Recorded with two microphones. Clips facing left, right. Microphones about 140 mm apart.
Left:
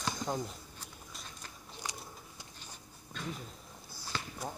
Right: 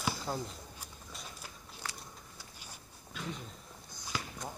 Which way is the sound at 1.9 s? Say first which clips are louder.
Left 1 dB; 15° left (ahead or behind).